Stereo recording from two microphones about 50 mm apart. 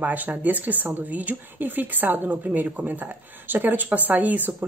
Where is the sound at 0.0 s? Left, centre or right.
Right.